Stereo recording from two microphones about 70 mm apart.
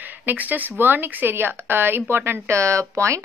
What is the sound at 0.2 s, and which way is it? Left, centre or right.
Speech, right.